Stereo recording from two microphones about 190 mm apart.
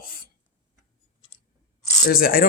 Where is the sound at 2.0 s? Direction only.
50° left (ahead or behind).